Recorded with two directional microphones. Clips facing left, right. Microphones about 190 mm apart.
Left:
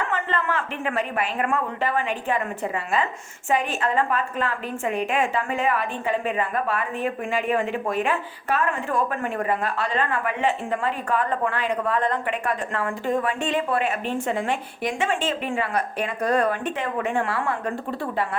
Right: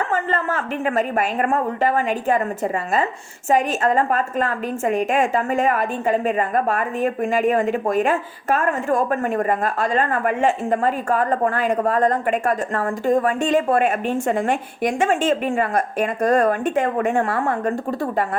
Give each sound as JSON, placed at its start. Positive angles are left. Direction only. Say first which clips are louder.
{"t": 0.1, "sound": "a woman's voice", "louder": "right 3 dB", "side_deg": -40}